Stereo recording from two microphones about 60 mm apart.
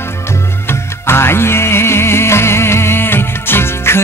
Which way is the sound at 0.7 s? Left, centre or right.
Left.